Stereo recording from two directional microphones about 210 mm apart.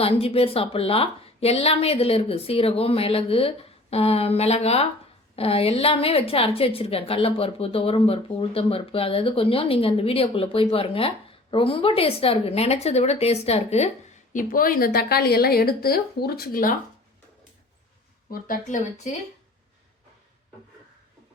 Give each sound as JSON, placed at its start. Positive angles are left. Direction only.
{"t": 0.0, "sound": "a woman's voice", "side_deg": 30}
{"t": 14.3, "sound": "a woman's voice", "side_deg": 40}
{"t": 18.3, "sound": "speech", "side_deg": 40}